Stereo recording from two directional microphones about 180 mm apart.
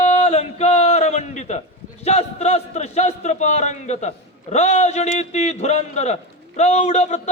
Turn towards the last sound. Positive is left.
turn(degrees=40)  # may be behind; listen again after turning